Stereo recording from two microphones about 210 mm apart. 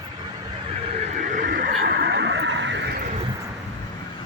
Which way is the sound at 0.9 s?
35° right (ahead or behind).